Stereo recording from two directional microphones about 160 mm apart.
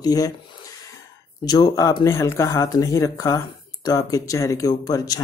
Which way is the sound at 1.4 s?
25° left (ahead or behind).